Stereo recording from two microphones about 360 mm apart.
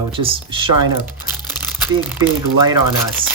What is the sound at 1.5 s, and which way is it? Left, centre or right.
Crumpling, centre.